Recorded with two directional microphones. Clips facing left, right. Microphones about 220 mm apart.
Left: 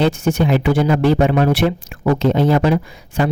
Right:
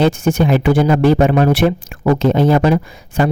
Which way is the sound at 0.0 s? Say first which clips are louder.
Right 2 dB; 50° right (ahead or behind).